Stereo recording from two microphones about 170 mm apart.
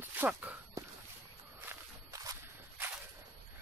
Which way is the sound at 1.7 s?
20° right (ahead or behind).